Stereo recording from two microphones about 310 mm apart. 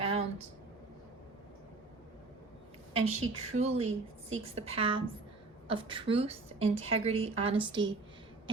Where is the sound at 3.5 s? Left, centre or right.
Centre.